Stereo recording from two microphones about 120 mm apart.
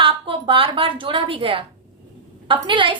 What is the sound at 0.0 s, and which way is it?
A woman's voice, 50° right (ahead or behind).